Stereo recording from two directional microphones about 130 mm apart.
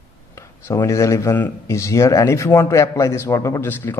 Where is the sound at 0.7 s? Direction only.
20° left (ahead or behind).